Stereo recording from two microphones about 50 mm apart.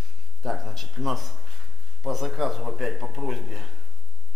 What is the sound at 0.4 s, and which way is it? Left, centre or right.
Speech, centre.